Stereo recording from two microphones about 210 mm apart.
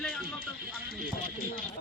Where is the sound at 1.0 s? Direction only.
45° left (ahead or behind).